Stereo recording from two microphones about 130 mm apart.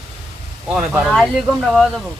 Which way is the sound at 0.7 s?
5° right (ahead or behind).